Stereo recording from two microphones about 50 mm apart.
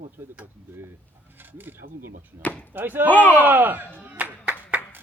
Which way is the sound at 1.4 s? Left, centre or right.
Right.